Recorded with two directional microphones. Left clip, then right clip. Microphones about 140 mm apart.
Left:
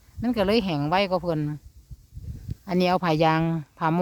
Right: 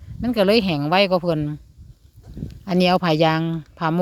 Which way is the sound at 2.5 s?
20° right (ahead or behind).